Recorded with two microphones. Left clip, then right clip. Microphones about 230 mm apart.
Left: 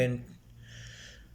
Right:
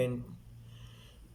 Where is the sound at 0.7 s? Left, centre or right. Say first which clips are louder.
Left 10 dB; centre.